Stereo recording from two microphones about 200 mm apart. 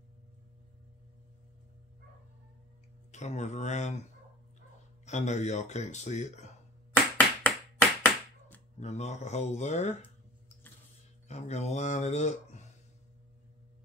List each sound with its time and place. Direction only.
3.1 s speech: 35° left (ahead or behind)
5.0 s speech: 35° left (ahead or behind)
6.9 s a sound: 10° left (ahead or behind)
8.7 s speech: 35° left (ahead or behind)
11.2 s speech: 35° left (ahead or behind)